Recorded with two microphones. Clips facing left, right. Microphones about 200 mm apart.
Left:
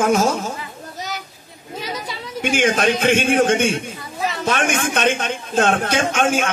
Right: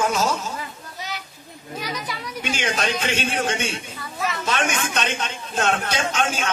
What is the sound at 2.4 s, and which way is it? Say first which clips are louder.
A man's voice: left 8 dB; 55° left (ahead or behind).